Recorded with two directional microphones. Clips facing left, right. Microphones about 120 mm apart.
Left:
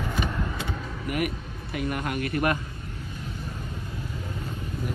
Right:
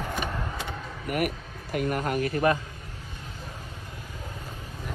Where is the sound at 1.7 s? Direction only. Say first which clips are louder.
Right 2 dB; 45° right (ahead or behind).